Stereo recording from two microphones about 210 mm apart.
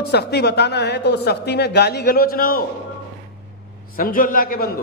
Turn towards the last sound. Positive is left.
turn(degrees=45)  # may be behind; listen again after turning